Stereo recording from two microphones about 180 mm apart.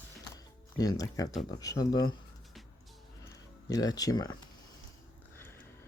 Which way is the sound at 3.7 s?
20° left (ahead or behind).